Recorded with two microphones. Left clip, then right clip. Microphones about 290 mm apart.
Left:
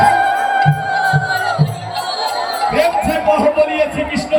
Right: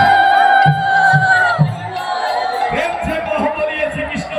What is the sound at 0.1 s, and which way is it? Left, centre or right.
Music, centre.